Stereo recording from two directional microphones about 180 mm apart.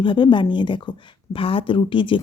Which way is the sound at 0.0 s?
25° left (ahead or behind).